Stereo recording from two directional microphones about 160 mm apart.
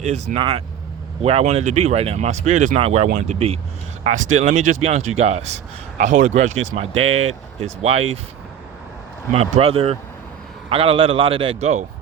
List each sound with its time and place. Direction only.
0.0 s a man's voice: 45° right (ahead or behind)
9.3 s a man's voice: 35° right (ahead or behind)